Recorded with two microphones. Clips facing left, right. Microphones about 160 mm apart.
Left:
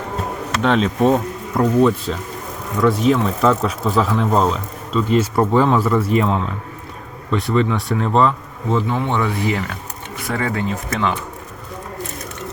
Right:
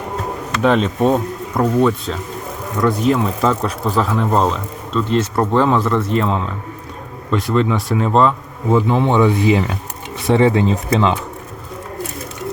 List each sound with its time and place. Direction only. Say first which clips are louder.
0.6 s speech: right 1 dB; centre (ahead or behind)
9.0 s speech: right 6 dB; 20° right (ahead or behind)